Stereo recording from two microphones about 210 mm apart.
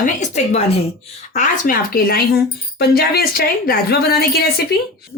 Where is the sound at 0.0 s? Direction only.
35° left (ahead or behind).